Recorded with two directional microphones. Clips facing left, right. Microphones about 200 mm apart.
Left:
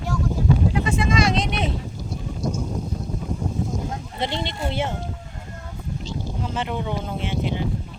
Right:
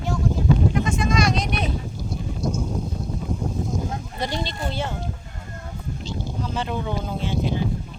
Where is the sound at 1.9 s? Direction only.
Centre (ahead or behind).